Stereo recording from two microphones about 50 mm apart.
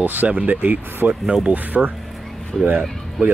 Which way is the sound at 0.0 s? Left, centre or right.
Right.